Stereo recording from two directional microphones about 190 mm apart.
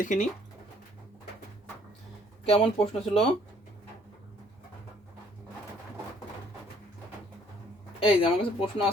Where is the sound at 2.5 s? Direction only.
30° left (ahead or behind).